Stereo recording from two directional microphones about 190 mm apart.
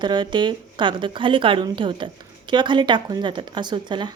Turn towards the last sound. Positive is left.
turn(degrees=-25)  # may be behind; listen again after turning